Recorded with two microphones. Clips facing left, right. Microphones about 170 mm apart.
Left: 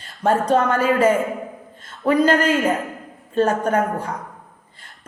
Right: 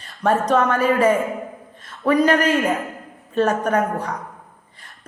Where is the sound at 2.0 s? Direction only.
30° left (ahead or behind).